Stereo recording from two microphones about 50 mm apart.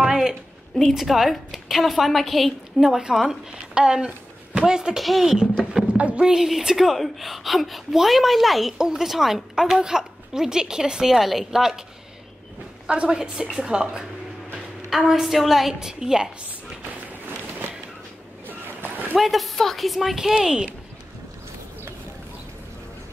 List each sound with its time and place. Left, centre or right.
0.0 s a sound: centre
0.3 s a sound: centre
0.9 s a woman's voice: centre
5.0 s a woman's voice: centre
5.9 s speech: right
6.2 s a woman's voice: centre
12.8 s a woman's voice: right
18.5 s a sound: right
19.1 s a woman's voice: centre